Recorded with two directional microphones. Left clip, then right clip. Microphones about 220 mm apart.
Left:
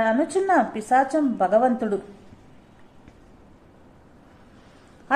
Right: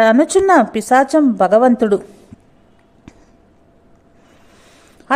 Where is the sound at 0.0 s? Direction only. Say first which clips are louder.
Right 10 dB; 45° right (ahead or behind).